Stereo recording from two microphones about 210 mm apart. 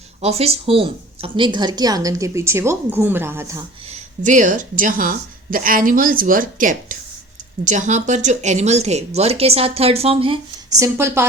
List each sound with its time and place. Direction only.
0.2 s speech: 30° right (ahead or behind); by 3.6 s 15° right (ahead or behind)
3.8 s speech: 35° right (ahead or behind); by 11.3 s 10° right (ahead or behind)